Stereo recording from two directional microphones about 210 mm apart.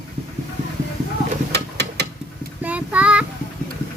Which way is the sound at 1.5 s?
50° right (ahead or behind).